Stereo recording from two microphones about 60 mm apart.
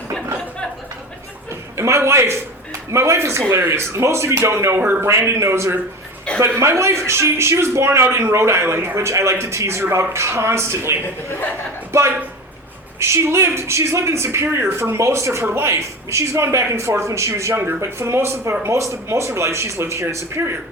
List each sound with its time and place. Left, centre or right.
1.7 s a man's voice: right
5.0 s a man's voice: right
6.3 s a sound: centre
6.6 s a man's voice: right
11.9 s a man's voice: right
14.9 s a man's voice: right
17.5 s a man's voice: right